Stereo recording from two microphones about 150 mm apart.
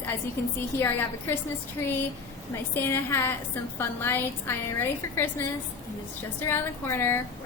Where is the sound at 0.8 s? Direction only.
15° left (ahead or behind).